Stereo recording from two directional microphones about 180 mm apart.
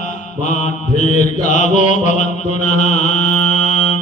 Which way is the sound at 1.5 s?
40° left (ahead or behind).